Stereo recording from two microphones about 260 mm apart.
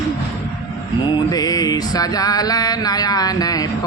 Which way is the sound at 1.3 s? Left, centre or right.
Centre.